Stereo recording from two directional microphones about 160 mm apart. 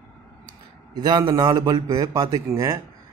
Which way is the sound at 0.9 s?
30° right (ahead or behind).